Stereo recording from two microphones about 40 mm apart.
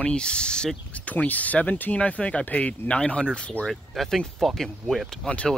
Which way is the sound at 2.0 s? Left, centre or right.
Left.